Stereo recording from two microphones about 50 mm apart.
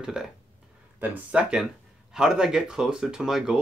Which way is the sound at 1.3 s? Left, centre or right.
Right.